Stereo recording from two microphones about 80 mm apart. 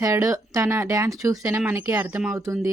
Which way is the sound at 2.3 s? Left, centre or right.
Right.